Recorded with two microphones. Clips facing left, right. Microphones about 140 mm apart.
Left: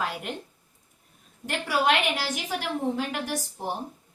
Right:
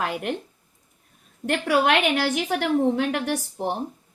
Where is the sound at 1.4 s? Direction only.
60° right (ahead or behind).